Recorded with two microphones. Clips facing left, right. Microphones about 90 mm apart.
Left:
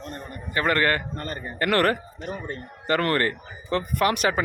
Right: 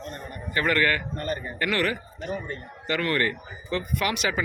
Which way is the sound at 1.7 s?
50° left (ahead or behind).